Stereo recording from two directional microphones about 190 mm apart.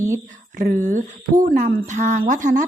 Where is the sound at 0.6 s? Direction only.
40° right (ahead or behind).